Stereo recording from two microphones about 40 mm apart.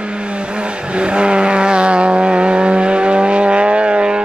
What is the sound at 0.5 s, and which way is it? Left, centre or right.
Vehicle, right.